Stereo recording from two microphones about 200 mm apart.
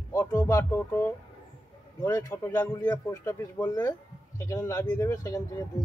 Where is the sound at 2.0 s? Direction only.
15° left (ahead or behind).